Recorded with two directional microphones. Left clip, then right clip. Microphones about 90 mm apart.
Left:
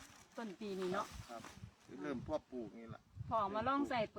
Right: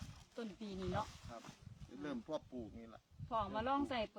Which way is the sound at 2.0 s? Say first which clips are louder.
Left 2 dB; 20° right (ahead or behind).